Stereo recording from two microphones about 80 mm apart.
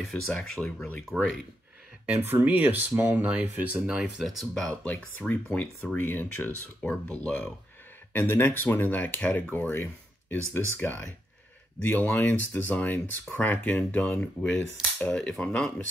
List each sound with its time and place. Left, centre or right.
0.0 s speech: centre
2.2 s speech: right
4.2 s speech: centre
5.3 s speech: left